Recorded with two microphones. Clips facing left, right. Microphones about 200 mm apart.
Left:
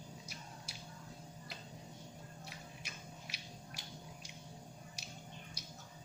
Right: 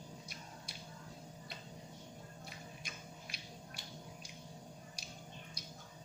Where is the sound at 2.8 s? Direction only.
70° left (ahead or behind).